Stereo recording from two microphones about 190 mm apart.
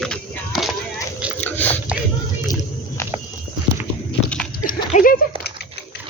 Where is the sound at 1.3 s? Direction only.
10° left (ahead or behind).